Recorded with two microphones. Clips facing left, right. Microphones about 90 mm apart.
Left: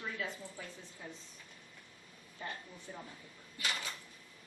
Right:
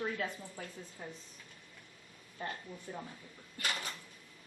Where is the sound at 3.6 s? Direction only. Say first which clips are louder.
Right 1 dB; 55° right (ahead or behind).